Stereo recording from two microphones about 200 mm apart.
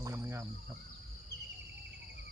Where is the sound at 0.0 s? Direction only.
15° right (ahead or behind).